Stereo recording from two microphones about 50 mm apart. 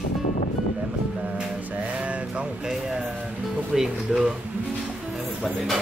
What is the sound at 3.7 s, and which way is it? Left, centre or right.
Speech, centre.